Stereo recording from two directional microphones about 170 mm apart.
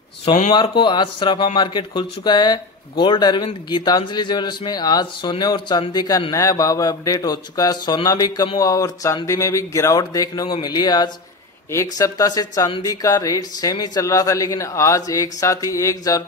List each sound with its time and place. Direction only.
0.6 s speech: 30° left (ahead or behind)